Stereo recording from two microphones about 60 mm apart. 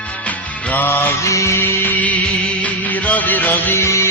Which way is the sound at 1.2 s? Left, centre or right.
Left.